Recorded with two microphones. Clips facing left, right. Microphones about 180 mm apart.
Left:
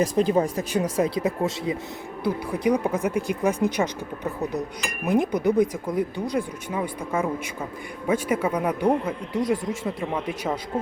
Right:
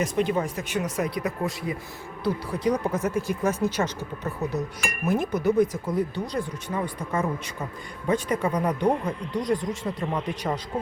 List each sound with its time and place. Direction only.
0.0 s speech: 35° left (ahead or behind)
2.2 s speech: 10° left (ahead or behind)